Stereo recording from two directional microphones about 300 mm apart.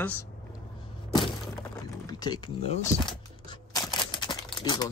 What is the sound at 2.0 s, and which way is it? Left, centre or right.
Speech, centre.